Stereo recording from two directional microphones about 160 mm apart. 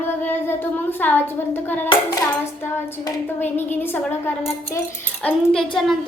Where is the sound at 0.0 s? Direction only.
15° left (ahead or behind).